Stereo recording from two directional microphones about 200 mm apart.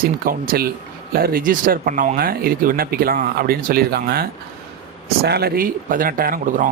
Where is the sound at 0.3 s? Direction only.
45° right (ahead or behind).